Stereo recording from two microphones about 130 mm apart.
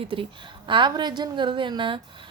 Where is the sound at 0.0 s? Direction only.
40° right (ahead or behind).